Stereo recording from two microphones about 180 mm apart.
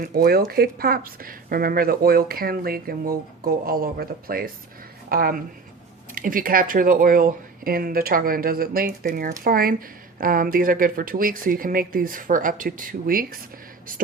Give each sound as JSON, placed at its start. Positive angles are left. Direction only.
{"t": 0.0, "sound": "a woman's voice", "side_deg": -55}